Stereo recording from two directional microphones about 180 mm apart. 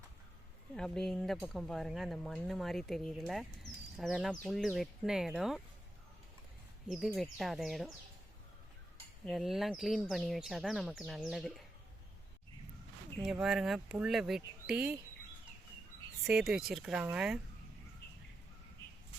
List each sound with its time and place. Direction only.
0.7 s speech: 5° left (ahead or behind)
6.9 s speech: centre (ahead or behind)
9.2 s speech: centre (ahead or behind)
13.2 s speech: 5° right (ahead or behind)
16.2 s speech: centre (ahead or behind)
18.0 s bird: 65° left (ahead or behind)